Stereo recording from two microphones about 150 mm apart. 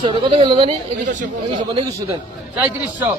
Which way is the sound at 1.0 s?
55° right (ahead or behind).